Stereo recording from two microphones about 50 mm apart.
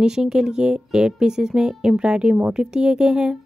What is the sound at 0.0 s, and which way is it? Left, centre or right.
A woman's voice, centre.